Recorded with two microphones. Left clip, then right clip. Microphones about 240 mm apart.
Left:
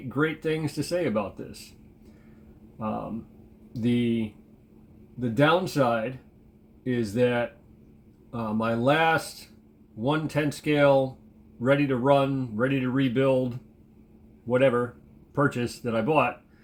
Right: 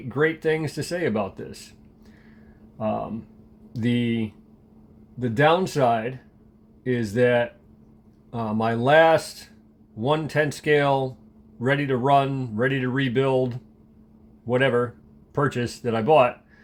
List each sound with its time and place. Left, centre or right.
0.1 s speech: right
3.7 s speech: right
5.2 s speech: right